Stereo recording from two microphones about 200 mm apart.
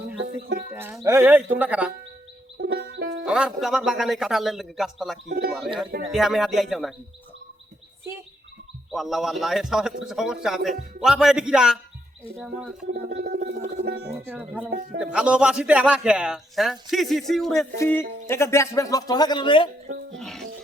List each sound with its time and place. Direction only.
0.7 s speech: 10° right (ahead or behind)
2.6 s music: 55° right (ahead or behind)
3.2 s a man's voice: 5° right (ahead or behind)
8.9 s a man's voice: centre (ahead or behind)
12.9 s music: 50° right (ahead or behind)
14.3 s a man's voice: 5° right (ahead or behind); by 19.7 s 25° left (ahead or behind)
20.1 s a man's voice: centre (ahead or behind)